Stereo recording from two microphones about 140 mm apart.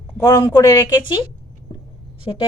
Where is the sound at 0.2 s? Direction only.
25° left (ahead or behind).